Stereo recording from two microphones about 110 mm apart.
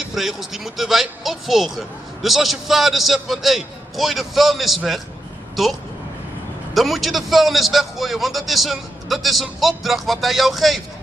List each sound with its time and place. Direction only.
0.1 s speech: centre (ahead or behind)